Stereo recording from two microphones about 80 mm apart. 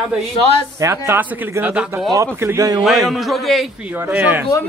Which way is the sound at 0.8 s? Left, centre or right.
Right.